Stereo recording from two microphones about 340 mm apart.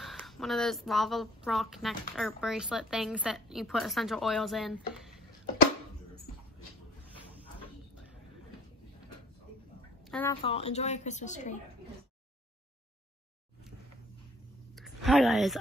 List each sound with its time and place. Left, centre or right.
0.0 s speech: centre
10.1 s a woman's voice: centre
14.8 s speech: centre